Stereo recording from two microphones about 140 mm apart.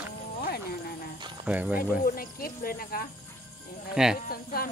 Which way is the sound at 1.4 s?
10° right (ahead or behind).